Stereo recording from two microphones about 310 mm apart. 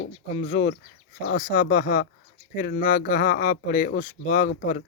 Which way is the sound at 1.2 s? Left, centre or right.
Left.